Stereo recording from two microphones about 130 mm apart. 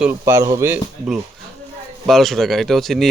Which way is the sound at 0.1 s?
20° right (ahead or behind).